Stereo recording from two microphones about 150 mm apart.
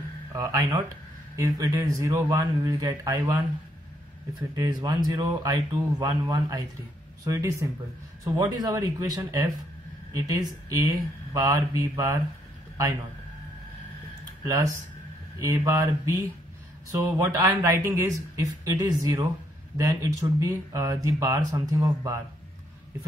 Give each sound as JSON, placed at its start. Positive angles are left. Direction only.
{"t": 0.3, "sound": "a man's voice", "side_deg": -25}
{"t": 4.4, "sound": "a man's voice", "side_deg": -30}
{"t": 14.4, "sound": "a man's voice", "side_deg": -20}
{"t": 17.2, "sound": "a man's voice", "side_deg": -25}